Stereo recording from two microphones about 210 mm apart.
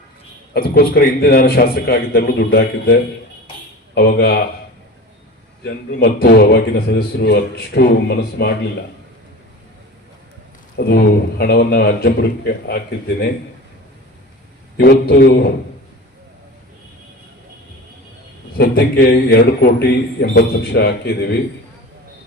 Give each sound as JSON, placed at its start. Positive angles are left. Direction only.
{"t": 0.5, "sound": "a man's voice", "side_deg": 45}
{"t": 5.6, "sound": "a man's voice", "side_deg": 50}
{"t": 10.8, "sound": "a man's voice", "side_deg": 45}
{"t": 14.8, "sound": "a man's voice", "side_deg": 50}
{"t": 18.5, "sound": "a man's voice", "side_deg": 45}